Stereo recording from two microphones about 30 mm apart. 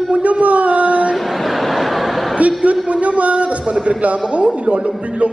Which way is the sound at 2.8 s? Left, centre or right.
Right.